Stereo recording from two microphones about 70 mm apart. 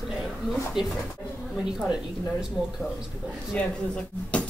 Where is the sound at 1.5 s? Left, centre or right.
Centre.